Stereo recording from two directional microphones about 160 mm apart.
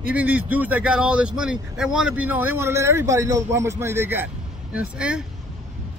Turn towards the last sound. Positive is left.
turn(degrees=-5)  # may be behind; listen again after turning